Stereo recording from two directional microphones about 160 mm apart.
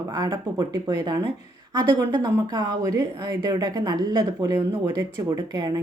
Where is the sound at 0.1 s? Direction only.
25° right (ahead or behind).